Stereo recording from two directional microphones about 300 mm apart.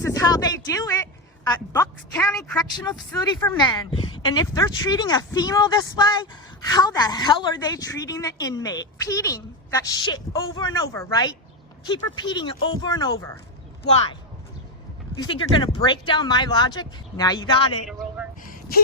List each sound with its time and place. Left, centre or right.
0.0 s speech: centre
2.1 s a woman's voice: centre
15.2 s speech: centre